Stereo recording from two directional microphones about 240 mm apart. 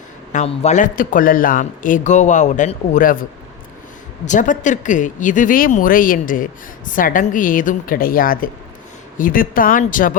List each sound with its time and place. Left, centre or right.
0.3 s speech: left
4.3 s speech: left